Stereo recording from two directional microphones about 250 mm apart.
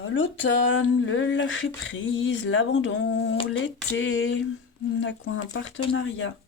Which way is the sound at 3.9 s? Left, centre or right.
Left.